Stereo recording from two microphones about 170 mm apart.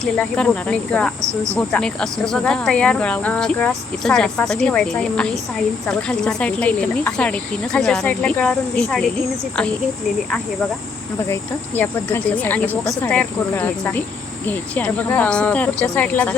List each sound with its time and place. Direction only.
0.0 s speech: 5° left (ahead or behind)
11.3 s speech: 15° left (ahead or behind)